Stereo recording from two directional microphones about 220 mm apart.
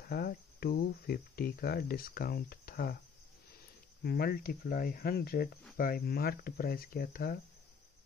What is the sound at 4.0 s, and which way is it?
Speech, 45° left (ahead or behind).